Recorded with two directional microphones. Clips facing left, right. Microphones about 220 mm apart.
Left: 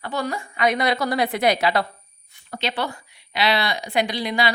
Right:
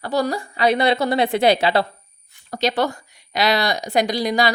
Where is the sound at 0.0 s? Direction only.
40° right (ahead or behind).